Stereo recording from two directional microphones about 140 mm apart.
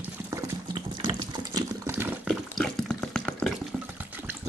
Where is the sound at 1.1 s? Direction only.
25° right (ahead or behind).